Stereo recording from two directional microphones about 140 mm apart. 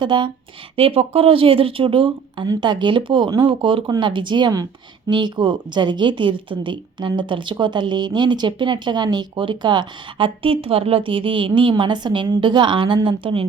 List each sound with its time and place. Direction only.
0.0 s speech: 35° right (ahead or behind)